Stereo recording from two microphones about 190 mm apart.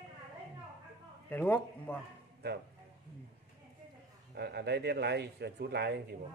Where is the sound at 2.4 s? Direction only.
60° right (ahead or behind).